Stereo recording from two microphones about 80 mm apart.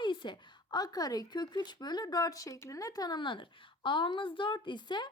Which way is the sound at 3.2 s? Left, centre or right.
Left.